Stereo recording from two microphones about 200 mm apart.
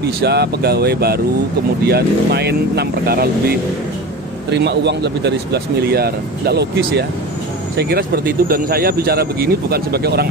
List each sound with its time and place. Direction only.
0.2 s speech: 55° right (ahead or behind)